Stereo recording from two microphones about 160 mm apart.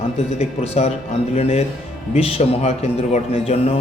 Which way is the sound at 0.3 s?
40° left (ahead or behind).